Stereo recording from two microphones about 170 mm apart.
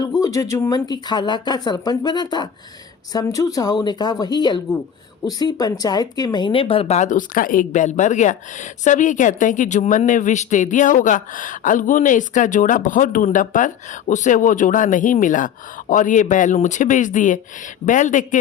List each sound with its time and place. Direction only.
0.0 s speech: 20° left (ahead or behind); by 18.3 s 50° left (ahead or behind)